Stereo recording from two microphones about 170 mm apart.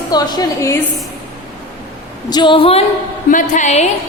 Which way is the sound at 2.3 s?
25° left (ahead or behind).